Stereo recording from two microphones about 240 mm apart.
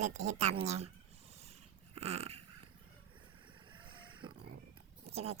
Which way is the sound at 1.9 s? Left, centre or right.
Right.